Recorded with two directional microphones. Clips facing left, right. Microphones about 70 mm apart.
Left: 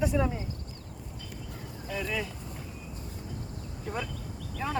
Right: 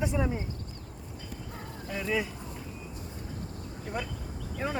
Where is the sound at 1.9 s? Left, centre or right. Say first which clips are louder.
Right 2 dB; centre.